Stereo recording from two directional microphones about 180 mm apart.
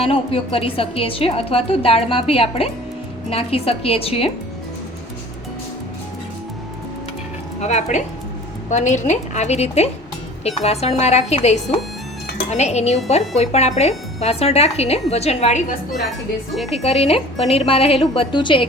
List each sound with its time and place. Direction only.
0.0 s a woman's voice: 30° left (ahead or behind)
7.6 s a woman's voice: 40° left (ahead or behind)
16.7 s a woman's voice: 35° left (ahead or behind)